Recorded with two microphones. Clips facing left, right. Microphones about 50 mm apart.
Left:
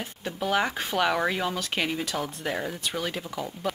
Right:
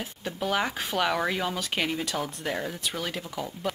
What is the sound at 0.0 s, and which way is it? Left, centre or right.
Speech, centre.